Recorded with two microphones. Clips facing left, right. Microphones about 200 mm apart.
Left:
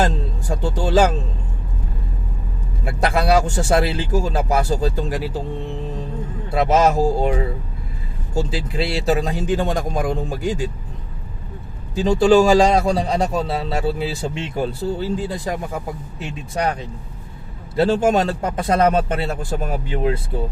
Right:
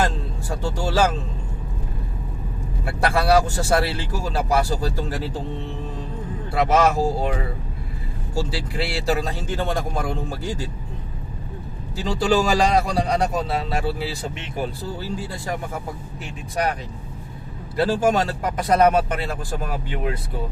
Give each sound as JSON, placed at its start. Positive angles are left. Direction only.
{"t": 0.0, "sound": "music", "side_deg": 20}
{"t": 2.8, "sound": "speech", "side_deg": 20}
{"t": 6.5, "sound": "speech", "side_deg": 20}
{"t": 8.4, "sound": "speech", "side_deg": 20}
{"t": 11.9, "sound": "speech", "side_deg": 25}
{"t": 17.7, "sound": "speech", "side_deg": 20}